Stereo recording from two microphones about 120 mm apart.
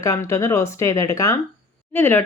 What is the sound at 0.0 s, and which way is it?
Speech, 25° left (ahead or behind).